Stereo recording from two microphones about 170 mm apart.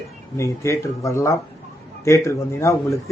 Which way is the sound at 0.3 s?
15° left (ahead or behind).